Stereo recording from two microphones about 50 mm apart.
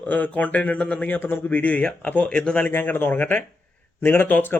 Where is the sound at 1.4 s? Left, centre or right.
Left.